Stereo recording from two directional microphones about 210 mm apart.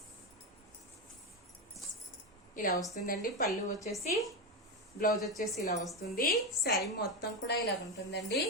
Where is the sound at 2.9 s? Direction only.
40° left (ahead or behind).